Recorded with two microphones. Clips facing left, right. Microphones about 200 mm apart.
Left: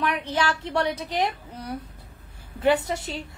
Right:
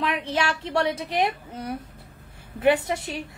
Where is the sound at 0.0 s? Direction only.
25° right (ahead or behind).